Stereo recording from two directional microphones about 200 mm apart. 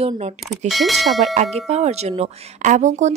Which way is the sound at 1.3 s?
35° right (ahead or behind).